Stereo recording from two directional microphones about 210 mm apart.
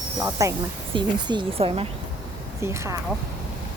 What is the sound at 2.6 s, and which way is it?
Speech, 15° right (ahead or behind).